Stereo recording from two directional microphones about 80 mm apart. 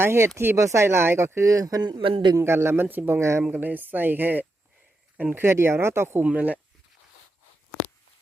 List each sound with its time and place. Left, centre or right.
0.0 s speech: right
1.9 s a man's voice: right
2.3 s speech: right
2.8 s speech: centre
3.1 s speech: right
3.5 s speech: right
5.4 s speech: right
6.2 s speech: centre